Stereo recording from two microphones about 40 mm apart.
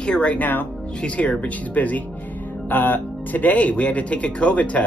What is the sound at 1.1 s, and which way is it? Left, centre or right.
Speech, left.